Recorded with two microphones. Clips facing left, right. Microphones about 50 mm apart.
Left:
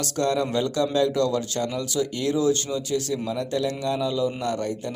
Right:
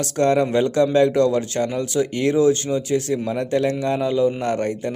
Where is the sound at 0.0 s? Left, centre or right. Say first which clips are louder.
Right 6 dB; right.